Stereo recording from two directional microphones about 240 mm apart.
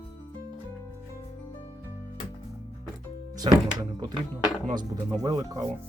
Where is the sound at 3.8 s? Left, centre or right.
Centre.